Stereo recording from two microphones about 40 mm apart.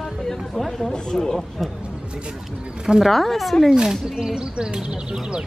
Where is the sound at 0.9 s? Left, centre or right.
Centre.